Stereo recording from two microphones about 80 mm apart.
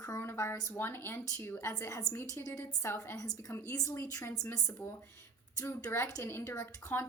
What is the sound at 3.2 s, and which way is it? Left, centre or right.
Speech, left.